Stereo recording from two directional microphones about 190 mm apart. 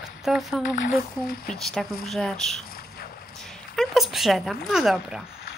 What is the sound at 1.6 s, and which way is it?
Speech, centre (ahead or behind).